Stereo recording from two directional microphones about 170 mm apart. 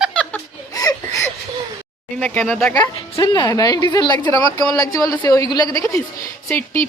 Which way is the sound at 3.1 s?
20° left (ahead or behind).